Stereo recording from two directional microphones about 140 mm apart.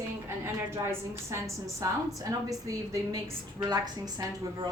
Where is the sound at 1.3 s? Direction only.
20° right (ahead or behind).